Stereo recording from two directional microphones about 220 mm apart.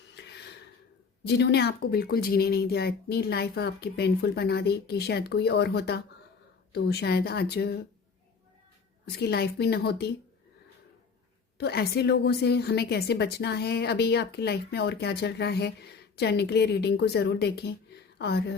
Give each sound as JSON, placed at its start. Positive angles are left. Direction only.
{"t": 0.1, "sound": "a sound", "side_deg": 50}
{"t": 1.3, "sound": "a woman's voice", "side_deg": 50}
{"t": 9.1, "sound": "a woman's voice", "side_deg": 50}
{"t": 11.5, "sound": "a woman's voice", "side_deg": 45}